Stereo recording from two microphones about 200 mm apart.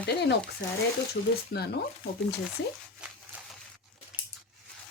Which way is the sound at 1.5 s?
55° left (ahead or behind).